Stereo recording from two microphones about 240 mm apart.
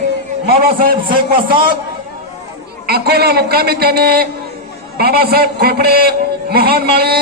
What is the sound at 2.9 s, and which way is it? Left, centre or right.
A man's voice, right.